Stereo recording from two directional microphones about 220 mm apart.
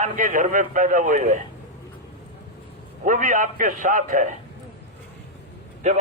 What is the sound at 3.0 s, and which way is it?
A man's voice, 35° right (ahead or behind).